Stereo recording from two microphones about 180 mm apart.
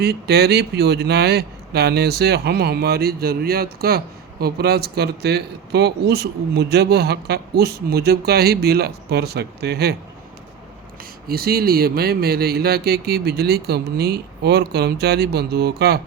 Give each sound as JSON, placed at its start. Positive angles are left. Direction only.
{"t": 0.0, "sound": "speech", "side_deg": -65}
{"t": 11.3, "sound": "speech", "side_deg": -55}